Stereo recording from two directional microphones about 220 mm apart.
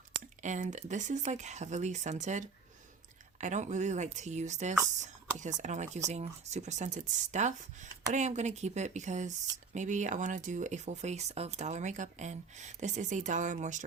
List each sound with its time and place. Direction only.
0.4 s speech: 35° right (ahead or behind)
3.4 s speech: 35° right (ahead or behind)